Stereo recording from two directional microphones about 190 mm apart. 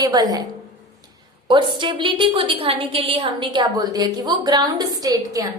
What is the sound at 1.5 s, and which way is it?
A woman's voice, 25° right (ahead or behind).